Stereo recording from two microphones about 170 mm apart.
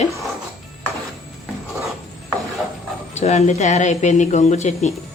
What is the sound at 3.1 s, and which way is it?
A woman's voice, 40° left (ahead or behind).